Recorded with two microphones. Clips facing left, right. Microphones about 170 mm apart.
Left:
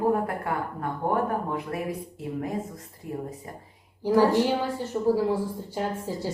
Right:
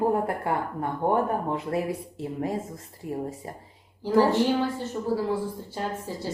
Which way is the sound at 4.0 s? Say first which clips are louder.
Even; 15° left (ahead or behind).